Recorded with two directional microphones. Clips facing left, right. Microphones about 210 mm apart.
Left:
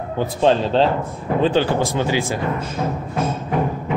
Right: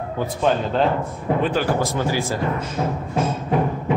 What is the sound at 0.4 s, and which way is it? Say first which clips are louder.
Speech: left 4 dB; 30° left (ahead or behind).